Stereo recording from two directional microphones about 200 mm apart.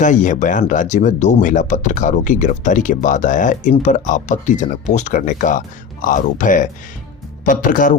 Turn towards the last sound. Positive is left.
turn(degrees=40)  # may be behind; listen again after turning